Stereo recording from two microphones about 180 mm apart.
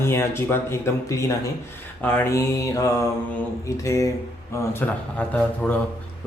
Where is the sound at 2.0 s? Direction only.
15° left (ahead or behind).